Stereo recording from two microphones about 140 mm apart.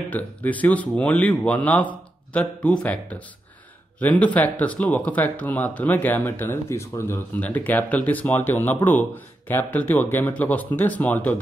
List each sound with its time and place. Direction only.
0.1 s speech: 10° left (ahead or behind)